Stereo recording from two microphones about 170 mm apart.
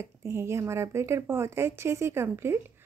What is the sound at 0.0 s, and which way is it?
Speech, 15° right (ahead or behind).